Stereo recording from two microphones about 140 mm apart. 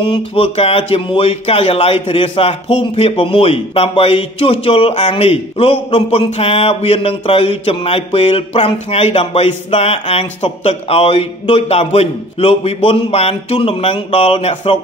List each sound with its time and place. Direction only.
0.0 s speech: 40° left (ahead or behind)